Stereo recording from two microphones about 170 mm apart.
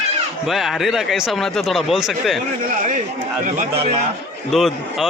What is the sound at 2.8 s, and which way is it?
Speech, 50° right (ahead or behind).